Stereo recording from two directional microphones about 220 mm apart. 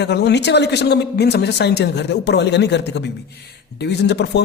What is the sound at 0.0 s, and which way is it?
A man's voice, 50° left (ahead or behind).